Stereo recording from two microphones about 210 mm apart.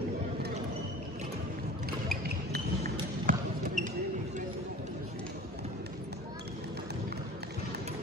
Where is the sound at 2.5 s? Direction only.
45° right (ahead or behind).